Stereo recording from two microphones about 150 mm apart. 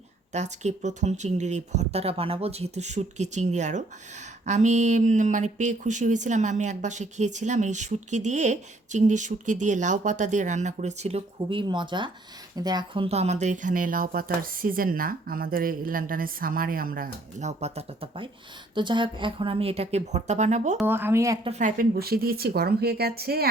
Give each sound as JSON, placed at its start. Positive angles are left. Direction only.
{"t": 0.3, "sound": "speech", "side_deg": -50}
{"t": 11.4, "sound": "speech", "side_deg": -30}
{"t": 17.4, "sound": "speech", "side_deg": -45}
{"t": 20.8, "sound": "speech", "side_deg": -15}
{"t": 21.4, "sound": "speech", "side_deg": -45}
{"t": 21.8, "sound": "a woman's voice", "side_deg": -90}